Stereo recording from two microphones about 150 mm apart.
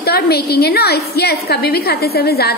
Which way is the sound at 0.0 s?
90° left.